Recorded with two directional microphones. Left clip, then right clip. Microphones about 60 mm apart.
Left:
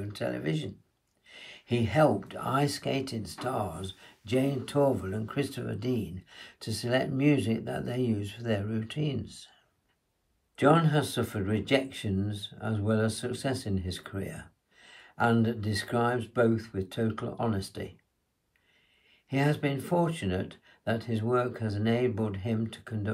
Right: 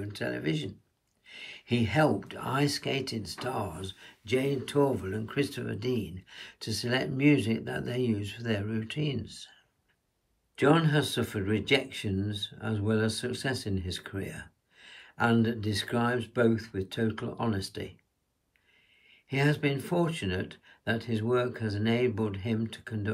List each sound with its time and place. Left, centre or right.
0.3 s speech: left
1.2 s speech: centre
4.3 s speech: left
5.0 s speech: left
19.0 s speech: left